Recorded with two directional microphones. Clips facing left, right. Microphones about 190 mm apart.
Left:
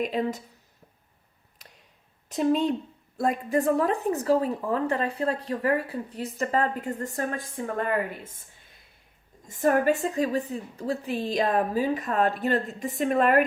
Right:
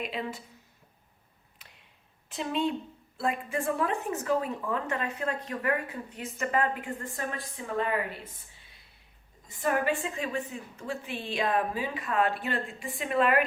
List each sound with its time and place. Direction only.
0.0 s speech: 40° left (ahead or behind)
2.3 s speech: 40° left (ahead or behind)